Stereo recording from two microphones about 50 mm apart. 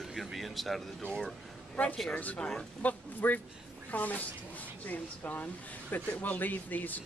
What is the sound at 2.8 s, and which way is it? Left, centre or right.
Speech, left.